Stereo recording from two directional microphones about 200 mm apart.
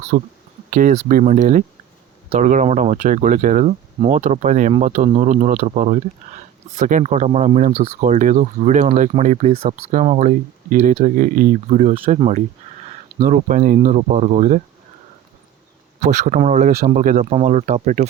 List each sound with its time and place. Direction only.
0.1 s speech: 45° right (ahead or behind)
16.0 s speech: 35° right (ahead or behind)